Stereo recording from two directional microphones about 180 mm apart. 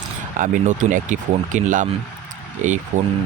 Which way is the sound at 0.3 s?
45° right (ahead or behind).